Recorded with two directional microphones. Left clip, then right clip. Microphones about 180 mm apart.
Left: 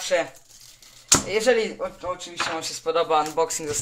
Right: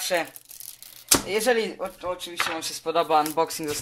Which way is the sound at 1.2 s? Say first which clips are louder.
Left 3 dB; 45° right (ahead or behind).